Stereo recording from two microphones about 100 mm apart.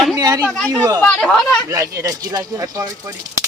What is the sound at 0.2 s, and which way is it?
Speech, 40° right (ahead or behind).